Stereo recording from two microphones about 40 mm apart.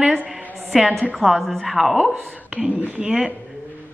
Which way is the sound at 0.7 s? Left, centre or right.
Centre.